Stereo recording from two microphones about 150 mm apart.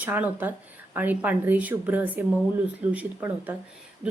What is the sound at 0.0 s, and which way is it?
Speech, 10° right (ahead or behind).